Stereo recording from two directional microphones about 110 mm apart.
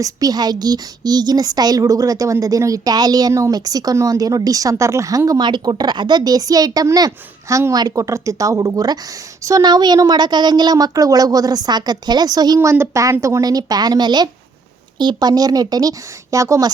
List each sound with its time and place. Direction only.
0.0 s speech: 35° right (ahead or behind)
12.5 s speech: 20° right (ahead or behind)